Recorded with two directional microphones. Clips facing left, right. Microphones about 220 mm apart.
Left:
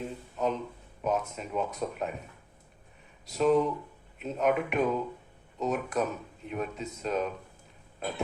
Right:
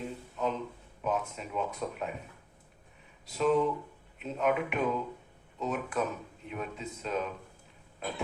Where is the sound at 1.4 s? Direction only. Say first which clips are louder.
Left 2 dB; 45° left (ahead or behind).